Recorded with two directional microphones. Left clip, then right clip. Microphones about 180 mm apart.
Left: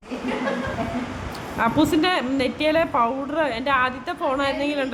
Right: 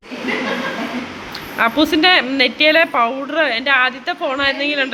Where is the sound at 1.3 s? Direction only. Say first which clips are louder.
Right 5 dB; 5° left (ahead or behind).